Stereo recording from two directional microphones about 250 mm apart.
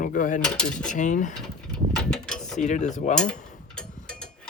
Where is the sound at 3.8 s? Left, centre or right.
Centre.